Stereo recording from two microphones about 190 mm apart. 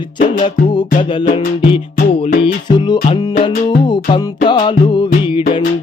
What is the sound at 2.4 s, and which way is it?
Music, 25° left (ahead or behind).